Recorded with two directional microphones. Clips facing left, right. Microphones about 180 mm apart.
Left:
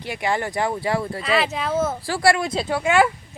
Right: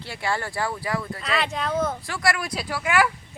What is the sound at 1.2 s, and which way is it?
Speech, 5° left (ahead or behind).